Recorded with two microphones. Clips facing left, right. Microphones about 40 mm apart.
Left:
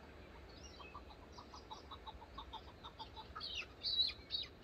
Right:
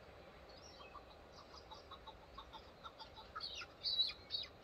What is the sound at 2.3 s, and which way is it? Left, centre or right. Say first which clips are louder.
Chicken: left 3 dB; left.